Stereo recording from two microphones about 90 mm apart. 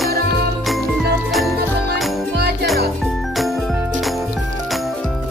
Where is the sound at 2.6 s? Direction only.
Centre (ahead or behind).